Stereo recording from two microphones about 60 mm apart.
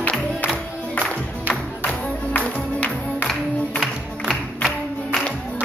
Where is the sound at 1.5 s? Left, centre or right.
Centre.